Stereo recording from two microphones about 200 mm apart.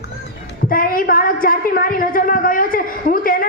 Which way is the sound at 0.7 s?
45° left (ahead or behind).